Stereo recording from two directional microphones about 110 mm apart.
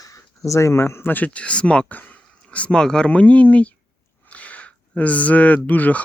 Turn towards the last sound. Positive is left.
turn(degrees=15)  # may be behind; listen again after turning